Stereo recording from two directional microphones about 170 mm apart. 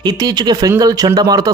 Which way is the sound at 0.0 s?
25° right (ahead or behind).